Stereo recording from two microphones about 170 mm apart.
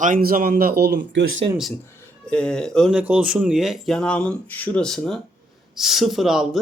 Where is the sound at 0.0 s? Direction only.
55° right (ahead or behind); by 1.2 s 80° right.